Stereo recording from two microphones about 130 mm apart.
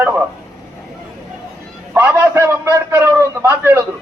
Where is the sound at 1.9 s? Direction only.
20° right (ahead or behind).